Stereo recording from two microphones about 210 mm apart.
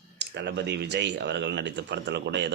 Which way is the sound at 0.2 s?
55° right (ahead or behind).